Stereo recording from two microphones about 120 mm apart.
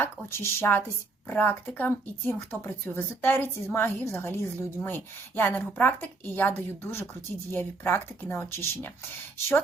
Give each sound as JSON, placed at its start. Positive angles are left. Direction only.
{"t": 0.0, "sound": "a woman's voice", "side_deg": 20}